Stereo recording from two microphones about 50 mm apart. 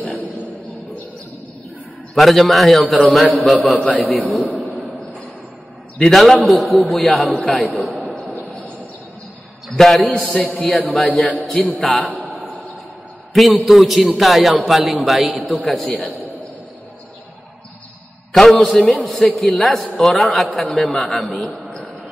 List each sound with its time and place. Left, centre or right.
2.1 s a man's voice: centre
3.8 s a man's voice: left
4.1 s a man's voice: centre
4.6 s a sound: centre
5.9 s a man's voice: centre
9.8 s a man's voice: centre
13.3 s a man's voice: centre
18.3 s a man's voice: centre
19.8 s a man's voice: centre